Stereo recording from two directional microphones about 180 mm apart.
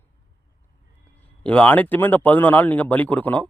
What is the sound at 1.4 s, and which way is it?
Speech, 5° left (ahead or behind).